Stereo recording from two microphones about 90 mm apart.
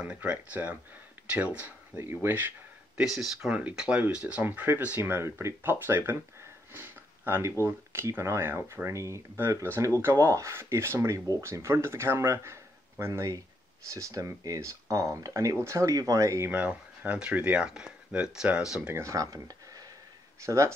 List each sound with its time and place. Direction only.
0.0 s speech: 15° right (ahead or behind)
3.2 s speech: 5° right (ahead or behind); by 6.2 s 25° right (ahead or behind)
6.7 s a sound: 25° right (ahead or behind)
7.6 s speech: 25° right (ahead or behind)
16.4 s speech: 20° right (ahead or behind)
18.9 s speech: 40° right (ahead or behind)